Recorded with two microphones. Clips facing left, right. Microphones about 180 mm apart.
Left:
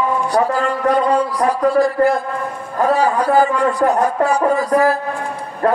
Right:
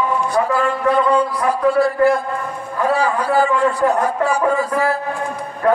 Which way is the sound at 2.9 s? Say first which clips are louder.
Left 2 dB; 40° left (ahead or behind).